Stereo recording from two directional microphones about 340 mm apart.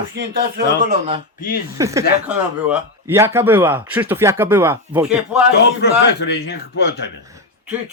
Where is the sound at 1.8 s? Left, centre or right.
Centre.